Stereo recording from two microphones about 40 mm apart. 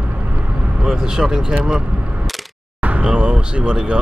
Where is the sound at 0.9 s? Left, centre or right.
Centre.